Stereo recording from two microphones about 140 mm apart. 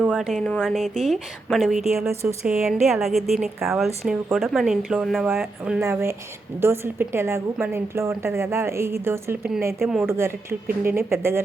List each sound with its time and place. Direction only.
0.0 s speech: 5° right (ahead or behind)
5.8 s a woman's voice: 20° right (ahead or behind)